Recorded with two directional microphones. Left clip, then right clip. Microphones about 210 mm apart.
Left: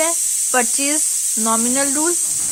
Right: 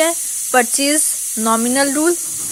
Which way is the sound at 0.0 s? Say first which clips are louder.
Right 2 dB; 15° right (ahead or behind).